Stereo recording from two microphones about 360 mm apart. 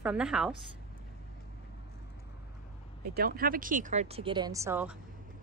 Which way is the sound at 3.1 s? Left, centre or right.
Right.